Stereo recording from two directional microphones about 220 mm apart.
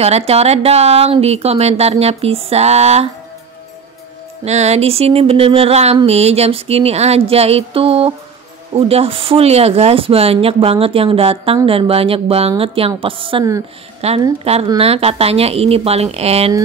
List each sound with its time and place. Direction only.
0.0 s speech: 30° right (ahead or behind)
4.5 s speech: 30° right (ahead or behind)